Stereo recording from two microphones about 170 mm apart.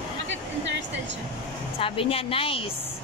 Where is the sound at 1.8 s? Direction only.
35° left (ahead or behind).